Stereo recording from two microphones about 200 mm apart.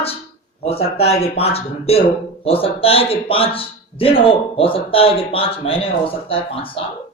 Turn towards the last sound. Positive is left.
turn(degrees=25)  # may be behind; listen again after turning